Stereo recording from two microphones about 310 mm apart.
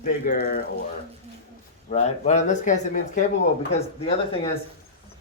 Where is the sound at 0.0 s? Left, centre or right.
Left.